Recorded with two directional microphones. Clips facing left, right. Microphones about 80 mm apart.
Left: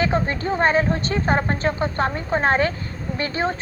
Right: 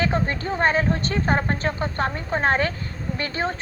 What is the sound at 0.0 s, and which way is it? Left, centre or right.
Speech, centre.